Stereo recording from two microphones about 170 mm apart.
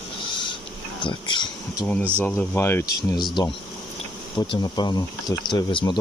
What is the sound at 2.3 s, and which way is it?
Speech, 10° left (ahead or behind).